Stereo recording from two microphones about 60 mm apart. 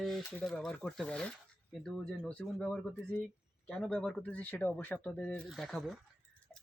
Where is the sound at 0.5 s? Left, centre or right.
Centre.